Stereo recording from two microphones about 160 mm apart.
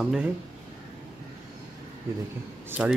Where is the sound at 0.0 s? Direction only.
5° right (ahead or behind).